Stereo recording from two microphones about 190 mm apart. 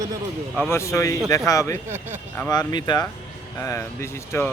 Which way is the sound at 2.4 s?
20° left (ahead or behind).